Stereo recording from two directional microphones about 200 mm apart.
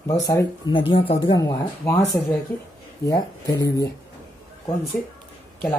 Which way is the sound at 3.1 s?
20° left (ahead or behind).